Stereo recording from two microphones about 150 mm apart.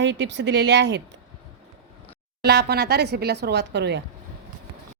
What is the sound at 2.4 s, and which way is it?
A woman's voice, 90° right.